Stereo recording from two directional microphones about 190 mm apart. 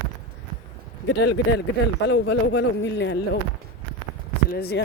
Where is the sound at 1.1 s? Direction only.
65° left (ahead or behind).